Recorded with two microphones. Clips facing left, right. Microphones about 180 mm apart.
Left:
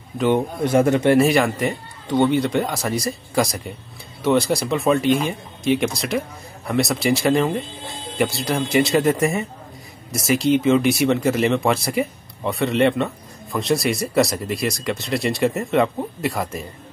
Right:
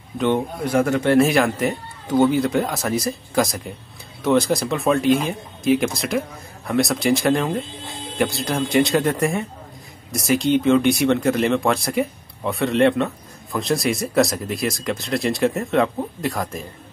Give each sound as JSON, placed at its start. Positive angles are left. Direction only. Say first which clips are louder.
{"t": 0.6, "sound": "a man's voice", "louder": "left 2 dB", "side_deg": 20}
{"t": 1.1, "sound": "speech", "louder": "even", "side_deg": 0}